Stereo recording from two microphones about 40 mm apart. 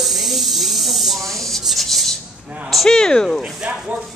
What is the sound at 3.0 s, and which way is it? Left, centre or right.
Speech, centre.